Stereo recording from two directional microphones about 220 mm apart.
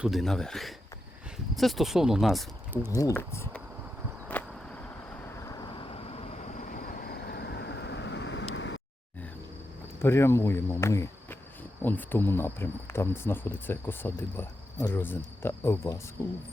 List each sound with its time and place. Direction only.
0.0 s speech: centre (ahead or behind)
2.9 s speech: 15° left (ahead or behind)
4.3 s a sound: 5° left (ahead or behind); by 8.8 s 55° left (ahead or behind)
10.0 s speech: 10° left (ahead or behind)